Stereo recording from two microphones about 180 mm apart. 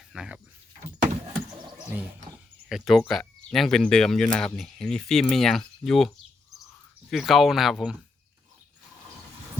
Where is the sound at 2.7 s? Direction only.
Centre (ahead or behind).